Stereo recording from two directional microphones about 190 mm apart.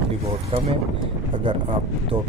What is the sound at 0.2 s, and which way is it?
Speech, 30° right (ahead or behind).